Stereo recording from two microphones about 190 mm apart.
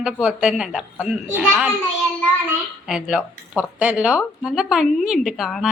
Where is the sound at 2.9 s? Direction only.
5° right (ahead or behind).